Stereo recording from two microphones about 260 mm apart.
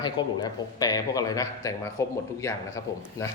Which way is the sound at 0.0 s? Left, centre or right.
Centre.